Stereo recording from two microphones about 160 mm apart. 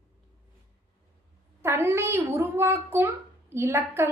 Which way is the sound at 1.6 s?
15° right (ahead or behind).